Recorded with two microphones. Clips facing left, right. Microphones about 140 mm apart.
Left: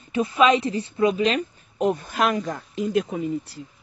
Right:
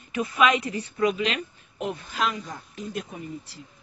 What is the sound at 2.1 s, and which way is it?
Speech, 55° left (ahead or behind).